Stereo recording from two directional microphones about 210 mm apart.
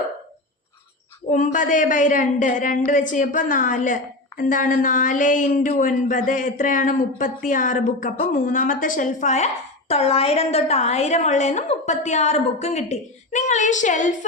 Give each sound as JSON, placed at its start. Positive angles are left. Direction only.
{"t": 1.3, "sound": "a woman's voice", "side_deg": 40}